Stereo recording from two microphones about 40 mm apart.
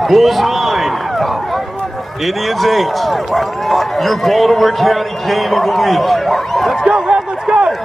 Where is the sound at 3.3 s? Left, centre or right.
Centre.